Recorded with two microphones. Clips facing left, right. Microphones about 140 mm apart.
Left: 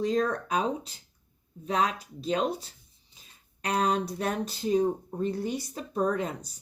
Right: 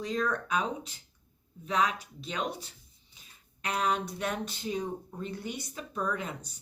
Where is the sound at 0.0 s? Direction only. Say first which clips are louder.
Left 5 dB; 35° left (ahead or behind).